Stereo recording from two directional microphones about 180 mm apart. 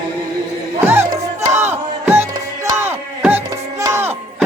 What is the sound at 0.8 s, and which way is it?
Music, 15° right (ahead or behind).